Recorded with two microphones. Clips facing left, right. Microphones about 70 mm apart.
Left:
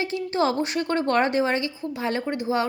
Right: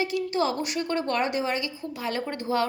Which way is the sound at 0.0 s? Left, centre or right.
Left.